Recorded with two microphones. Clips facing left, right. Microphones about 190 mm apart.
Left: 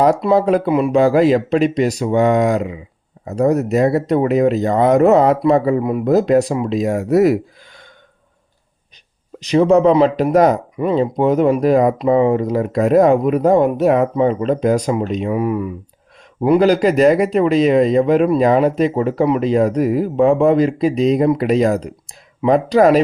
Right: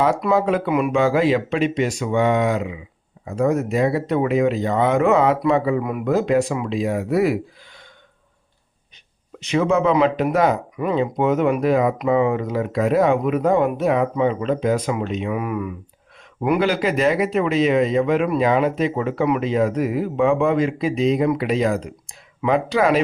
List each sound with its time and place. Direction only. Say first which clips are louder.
0.2 s speech: left 5 dB; 35° left (ahead or behind)
9.4 s speech: left 6 dB; 35° left (ahead or behind)
10.8 s speech: left 4 dB; 30° left (ahead or behind)